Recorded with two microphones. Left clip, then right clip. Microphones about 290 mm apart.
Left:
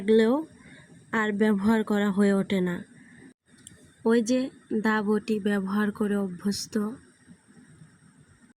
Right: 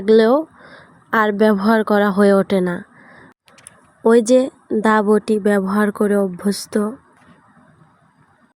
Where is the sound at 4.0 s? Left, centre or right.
Right.